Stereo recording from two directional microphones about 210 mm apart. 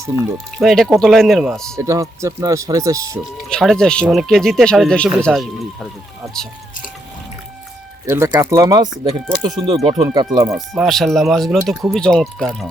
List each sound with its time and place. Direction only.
0.6 s speech: centre (ahead or behind)
1.7 s speech: 15° right (ahead or behind)
3.5 s speech: 5° left (ahead or behind)
8.0 s speech: 15° right (ahead or behind)
10.8 s speech: centre (ahead or behind)